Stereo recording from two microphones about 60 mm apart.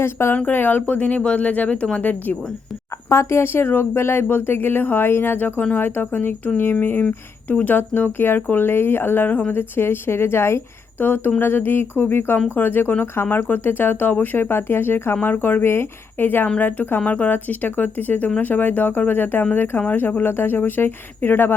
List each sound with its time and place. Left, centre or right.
0.0 s speech: left
0.3 s speech: left
3.1 s speech: left
11.0 s speech: left
17.0 s speech: left